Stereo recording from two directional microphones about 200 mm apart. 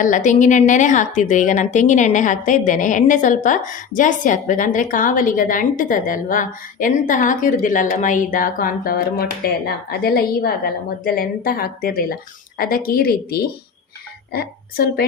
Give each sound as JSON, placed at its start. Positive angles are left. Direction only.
{"t": 0.0, "sound": "a woman's voice", "side_deg": 40}